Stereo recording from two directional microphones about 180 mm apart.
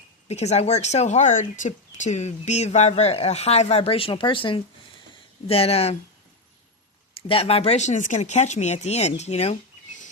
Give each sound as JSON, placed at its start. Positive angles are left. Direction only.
{"t": 0.3, "sound": "speech", "side_deg": 35}
{"t": 7.3, "sound": "speech", "side_deg": 35}